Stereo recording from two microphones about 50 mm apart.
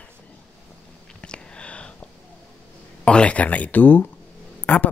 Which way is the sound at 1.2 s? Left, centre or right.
Left.